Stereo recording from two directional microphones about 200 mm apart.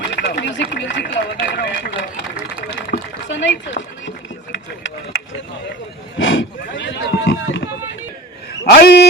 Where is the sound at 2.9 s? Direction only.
65° left (ahead or behind).